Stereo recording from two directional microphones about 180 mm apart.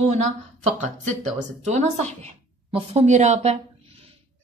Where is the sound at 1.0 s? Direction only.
40° right (ahead or behind).